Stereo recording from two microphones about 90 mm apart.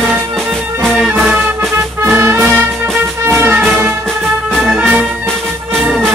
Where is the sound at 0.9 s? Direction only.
15° right (ahead or behind).